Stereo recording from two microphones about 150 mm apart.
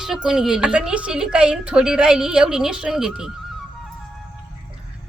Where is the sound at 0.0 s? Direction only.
5° right (ahead or behind).